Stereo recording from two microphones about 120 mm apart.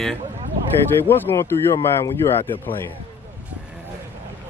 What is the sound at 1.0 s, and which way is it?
Speech, 20° left (ahead or behind).